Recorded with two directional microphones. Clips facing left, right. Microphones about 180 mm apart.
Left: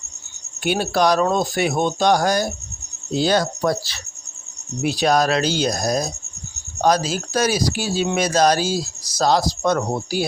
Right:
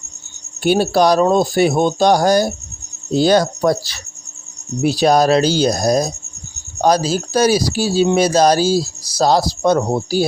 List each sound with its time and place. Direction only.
0.6 s speech: 35° right (ahead or behind)
4.8 s speech: 35° right (ahead or behind)